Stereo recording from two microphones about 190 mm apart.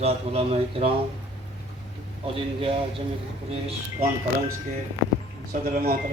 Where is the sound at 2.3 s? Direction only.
30° right (ahead or behind).